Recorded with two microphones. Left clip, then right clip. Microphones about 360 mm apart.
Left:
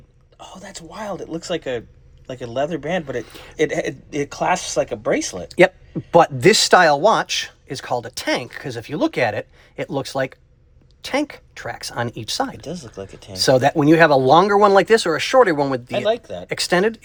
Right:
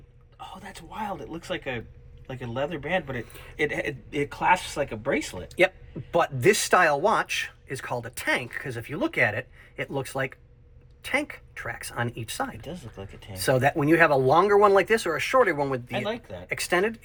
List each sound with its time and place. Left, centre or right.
0.3 s speech: centre
2.8 s speech: left
4.1 s speech: centre
6.1 s speech: left
16.0 s speech: centre
16.5 s speech: left